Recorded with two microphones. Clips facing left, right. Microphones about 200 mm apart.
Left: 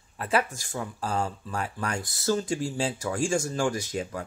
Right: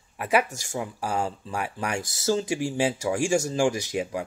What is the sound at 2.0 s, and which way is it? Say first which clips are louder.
Speech: right 3 dB; 90° right.